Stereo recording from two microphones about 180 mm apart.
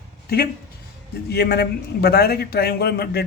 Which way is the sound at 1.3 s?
65° left (ahead or behind).